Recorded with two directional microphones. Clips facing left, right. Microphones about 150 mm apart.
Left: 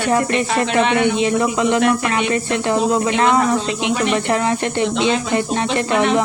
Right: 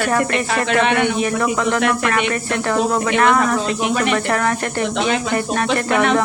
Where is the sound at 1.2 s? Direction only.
20° left (ahead or behind).